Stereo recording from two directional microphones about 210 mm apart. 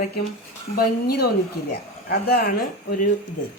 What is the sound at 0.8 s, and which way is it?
Speech, 50° left (ahead or behind).